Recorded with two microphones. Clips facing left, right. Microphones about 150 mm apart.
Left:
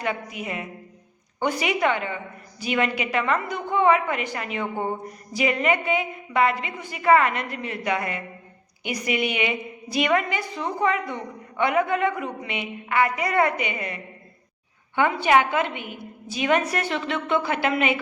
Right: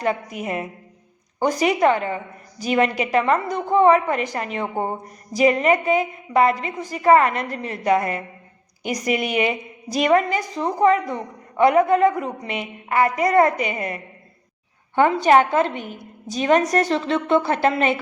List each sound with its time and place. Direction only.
0.0 s a woman's voice: 40° right (ahead or behind)